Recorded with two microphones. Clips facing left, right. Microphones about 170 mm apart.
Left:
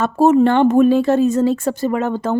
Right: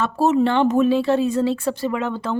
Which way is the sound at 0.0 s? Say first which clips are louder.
Left 5 dB; 50° left (ahead or behind).